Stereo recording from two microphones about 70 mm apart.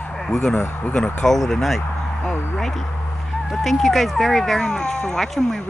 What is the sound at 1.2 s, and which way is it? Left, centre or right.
Speech, centre.